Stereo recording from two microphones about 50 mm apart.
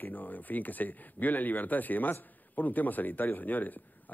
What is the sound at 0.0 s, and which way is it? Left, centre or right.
A man's voice, left.